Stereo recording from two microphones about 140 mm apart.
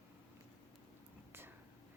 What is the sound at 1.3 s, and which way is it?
Whispering, 15° right (ahead or behind).